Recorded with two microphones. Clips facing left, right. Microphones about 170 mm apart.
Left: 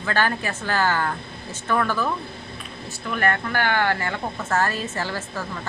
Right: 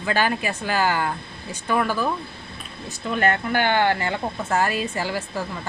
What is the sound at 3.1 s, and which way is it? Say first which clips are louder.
Speech: right 2 dB; 20° right (ahead or behind).